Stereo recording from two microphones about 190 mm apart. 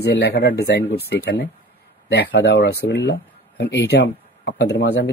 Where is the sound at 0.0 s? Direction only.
60° left (ahead or behind).